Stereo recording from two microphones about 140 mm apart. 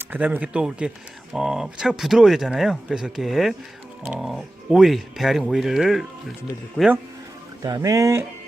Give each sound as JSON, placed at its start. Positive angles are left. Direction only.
{"t": 0.0, "sound": "speech", "side_deg": -10}
{"t": 6.8, "sound": "speech", "side_deg": 10}
{"t": 7.6, "sound": "speech", "side_deg": -25}